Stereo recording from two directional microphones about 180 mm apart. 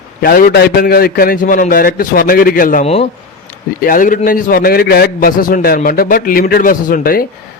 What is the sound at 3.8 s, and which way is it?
A man's voice, 50° left (ahead or behind).